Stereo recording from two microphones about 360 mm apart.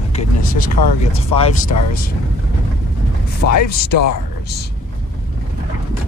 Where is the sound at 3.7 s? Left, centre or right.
Left.